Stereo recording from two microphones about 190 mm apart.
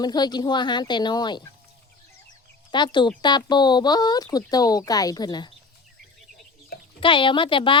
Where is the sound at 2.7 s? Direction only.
25° left (ahead or behind).